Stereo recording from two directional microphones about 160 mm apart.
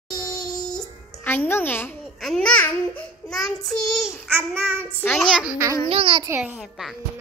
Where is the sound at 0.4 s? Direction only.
Centre (ahead or behind).